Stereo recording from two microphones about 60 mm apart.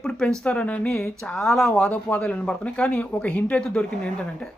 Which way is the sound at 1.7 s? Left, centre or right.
Centre.